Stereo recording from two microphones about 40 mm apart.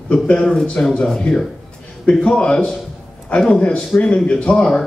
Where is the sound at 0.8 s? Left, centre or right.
Left.